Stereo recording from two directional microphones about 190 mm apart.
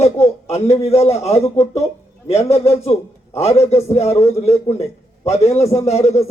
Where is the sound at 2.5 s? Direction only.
35° left (ahead or behind).